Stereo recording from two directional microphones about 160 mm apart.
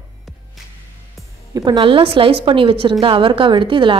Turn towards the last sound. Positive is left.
turn(degrees=-30)  # may be behind; listen again after turning